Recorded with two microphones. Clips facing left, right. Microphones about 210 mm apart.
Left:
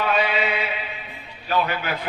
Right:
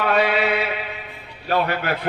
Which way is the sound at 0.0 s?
65° right (ahead or behind).